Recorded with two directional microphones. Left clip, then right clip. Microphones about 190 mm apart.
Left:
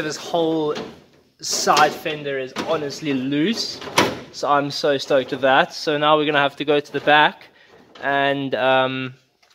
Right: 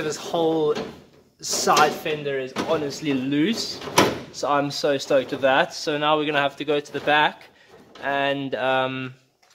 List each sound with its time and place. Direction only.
0.0 s speech: 25° left (ahead or behind)